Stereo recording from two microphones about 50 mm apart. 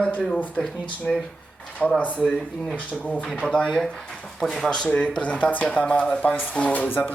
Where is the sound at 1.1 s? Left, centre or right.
Centre.